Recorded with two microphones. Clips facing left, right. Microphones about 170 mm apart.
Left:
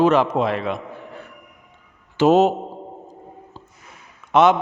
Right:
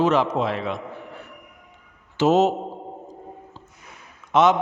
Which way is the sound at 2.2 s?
60° left (ahead or behind).